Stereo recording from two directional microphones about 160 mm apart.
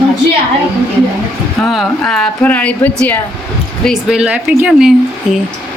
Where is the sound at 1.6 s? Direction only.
Centre (ahead or behind).